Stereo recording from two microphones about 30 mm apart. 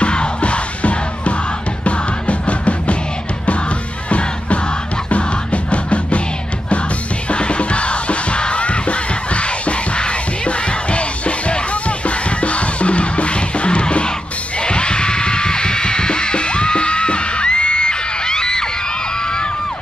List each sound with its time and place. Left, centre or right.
0.0 s music: left
4.1 s crowd: left
5.1 s music: left
7.2 s music: left